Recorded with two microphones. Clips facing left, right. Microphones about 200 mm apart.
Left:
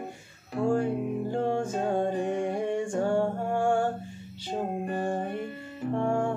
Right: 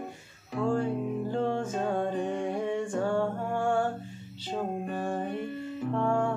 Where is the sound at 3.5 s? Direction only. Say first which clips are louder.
Left 3 dB; 50° left (ahead or behind).